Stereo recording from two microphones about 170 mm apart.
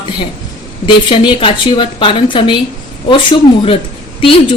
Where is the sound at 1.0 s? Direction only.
30° left (ahead or behind).